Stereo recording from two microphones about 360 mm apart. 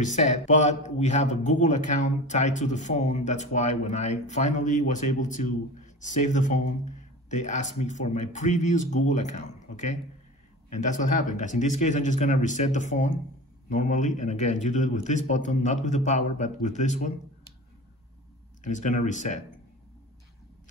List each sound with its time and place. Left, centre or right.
0.0 s a man's voice: centre
18.6 s a man's voice: left